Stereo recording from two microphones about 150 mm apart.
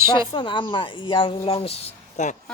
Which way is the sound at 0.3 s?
35° left (ahead or behind).